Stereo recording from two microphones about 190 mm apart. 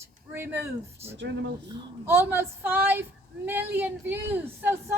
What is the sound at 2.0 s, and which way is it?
A woman's voice, 10° right (ahead or behind).